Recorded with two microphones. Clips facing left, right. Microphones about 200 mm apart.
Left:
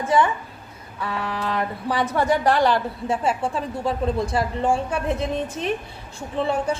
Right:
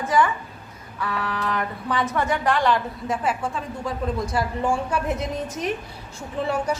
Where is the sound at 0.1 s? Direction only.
25° left (ahead or behind).